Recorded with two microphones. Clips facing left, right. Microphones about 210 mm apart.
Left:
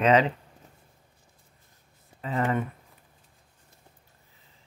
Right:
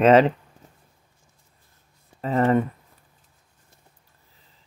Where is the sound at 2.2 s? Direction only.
40° right (ahead or behind).